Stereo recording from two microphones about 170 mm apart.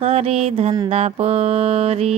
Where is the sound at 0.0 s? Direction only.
35° right (ahead or behind).